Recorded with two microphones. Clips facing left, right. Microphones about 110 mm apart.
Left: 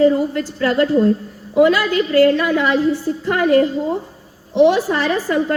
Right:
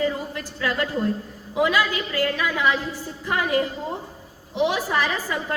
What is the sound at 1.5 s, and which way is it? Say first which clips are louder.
Speech: left 8 dB; 45° left (ahead or behind).